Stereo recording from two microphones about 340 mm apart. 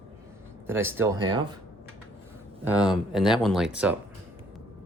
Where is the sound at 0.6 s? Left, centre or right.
Centre.